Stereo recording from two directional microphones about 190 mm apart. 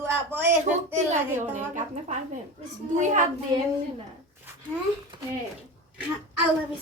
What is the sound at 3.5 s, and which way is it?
Speech, 20° right (ahead or behind).